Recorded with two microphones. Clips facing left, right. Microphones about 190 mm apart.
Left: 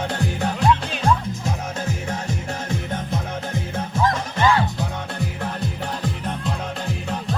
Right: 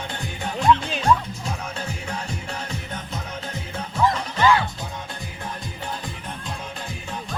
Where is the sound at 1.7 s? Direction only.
45° left (ahead or behind).